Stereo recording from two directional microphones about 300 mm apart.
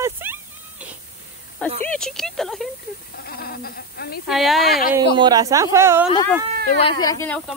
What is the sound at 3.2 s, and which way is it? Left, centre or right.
Speech, left.